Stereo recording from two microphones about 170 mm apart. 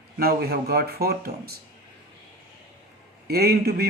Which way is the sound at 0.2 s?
65° right (ahead or behind).